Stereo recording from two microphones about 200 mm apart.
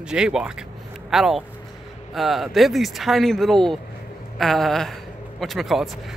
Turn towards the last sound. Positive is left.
turn(degrees=0)  # may be behind; listen again after turning